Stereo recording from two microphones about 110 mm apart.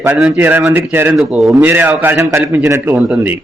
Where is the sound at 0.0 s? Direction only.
20° right (ahead or behind).